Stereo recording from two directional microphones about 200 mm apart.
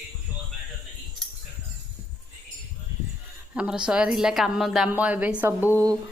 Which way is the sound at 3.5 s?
5° right (ahead or behind).